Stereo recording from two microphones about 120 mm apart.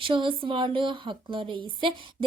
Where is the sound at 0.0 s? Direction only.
45° right (ahead or behind).